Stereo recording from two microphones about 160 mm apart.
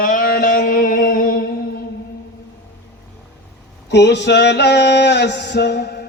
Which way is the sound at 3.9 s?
90° left.